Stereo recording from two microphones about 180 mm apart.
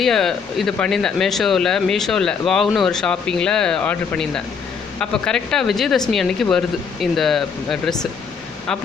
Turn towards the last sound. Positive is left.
turn(degrees=0)  # may be behind; listen again after turning